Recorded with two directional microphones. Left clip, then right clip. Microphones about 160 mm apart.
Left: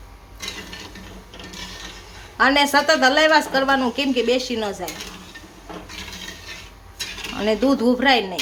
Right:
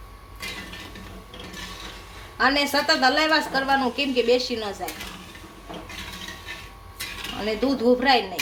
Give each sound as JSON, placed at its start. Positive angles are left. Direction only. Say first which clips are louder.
{"t": 2.4, "sound": "a woman's voice", "louder": "left 5 dB", "side_deg": 35}
{"t": 7.3, "sound": "a woman's voice", "louder": "left 6 dB", "side_deg": 35}